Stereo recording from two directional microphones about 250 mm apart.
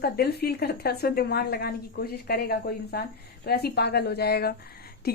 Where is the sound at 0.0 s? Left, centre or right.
Left.